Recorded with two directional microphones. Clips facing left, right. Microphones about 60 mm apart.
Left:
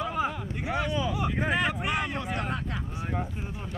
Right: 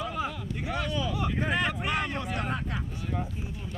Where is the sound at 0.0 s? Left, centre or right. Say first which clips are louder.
Left 3 dB; centre.